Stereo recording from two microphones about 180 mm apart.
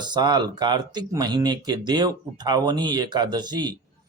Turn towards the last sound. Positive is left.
turn(degrees=-25)  # may be behind; listen again after turning